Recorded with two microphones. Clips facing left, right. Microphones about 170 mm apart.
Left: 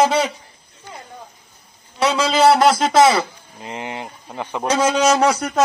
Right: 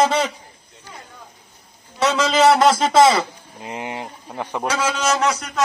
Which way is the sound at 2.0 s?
10° left (ahead or behind).